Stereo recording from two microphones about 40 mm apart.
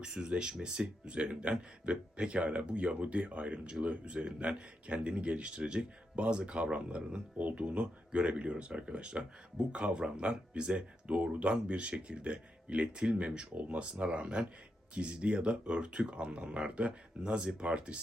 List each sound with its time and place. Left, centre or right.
0.0 s speech: centre